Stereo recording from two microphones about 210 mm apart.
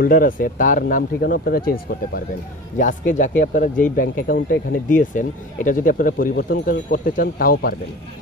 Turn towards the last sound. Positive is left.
turn(degrees=45)  # may be behind; listen again after turning